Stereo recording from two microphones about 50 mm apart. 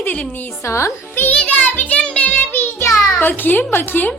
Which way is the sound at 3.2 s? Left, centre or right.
Left.